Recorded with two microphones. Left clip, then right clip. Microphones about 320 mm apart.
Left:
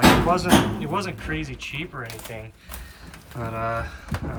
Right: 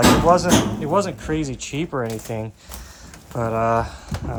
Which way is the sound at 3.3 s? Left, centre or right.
Centre.